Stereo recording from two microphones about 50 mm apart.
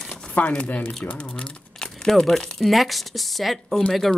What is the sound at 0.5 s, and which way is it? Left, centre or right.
Speech, left.